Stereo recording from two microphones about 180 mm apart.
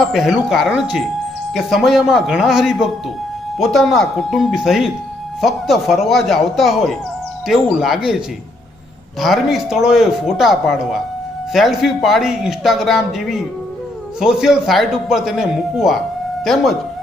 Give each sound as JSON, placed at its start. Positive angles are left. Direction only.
{"t": 0.0, "sound": "a man's voice", "side_deg": 0}
{"t": 9.2, "sound": "a man's voice", "side_deg": 0}